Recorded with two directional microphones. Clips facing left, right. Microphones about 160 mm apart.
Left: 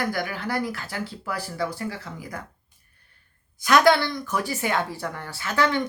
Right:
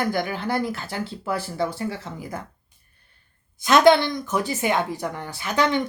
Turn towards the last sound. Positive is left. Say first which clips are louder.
# right 2 dB
turn(degrees=-20)  # may be behind; listen again after turning